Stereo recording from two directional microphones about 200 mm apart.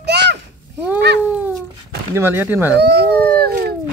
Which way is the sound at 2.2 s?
10° right (ahead or behind).